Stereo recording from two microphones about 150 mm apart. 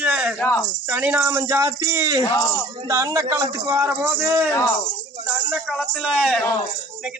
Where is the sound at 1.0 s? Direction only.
15° right (ahead or behind).